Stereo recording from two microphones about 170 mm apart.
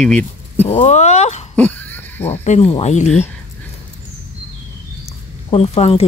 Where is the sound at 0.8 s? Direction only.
45° left (ahead or behind).